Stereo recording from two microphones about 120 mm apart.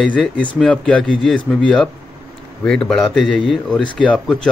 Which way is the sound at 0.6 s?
5° left (ahead or behind).